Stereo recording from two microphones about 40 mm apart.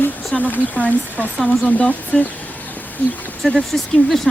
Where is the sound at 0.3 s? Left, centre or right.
Left.